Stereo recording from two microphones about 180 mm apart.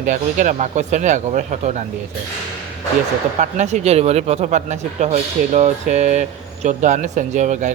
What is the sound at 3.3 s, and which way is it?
Speech, 40° right (ahead or behind).